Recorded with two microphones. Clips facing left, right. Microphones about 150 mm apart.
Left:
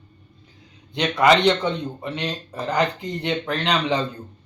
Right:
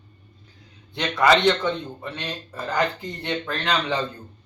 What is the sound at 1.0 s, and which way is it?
Speech, 15° left (ahead or behind).